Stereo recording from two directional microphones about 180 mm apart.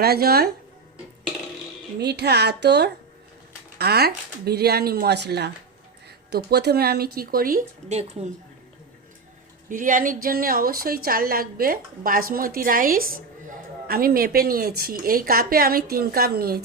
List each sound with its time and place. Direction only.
0.0 s a woman's voice: 60° right (ahead or behind)
2.0 s a woman's voice: 65° right (ahead or behind); by 8.3 s 40° right (ahead or behind)
9.6 s a woman's voice: 45° right (ahead or behind)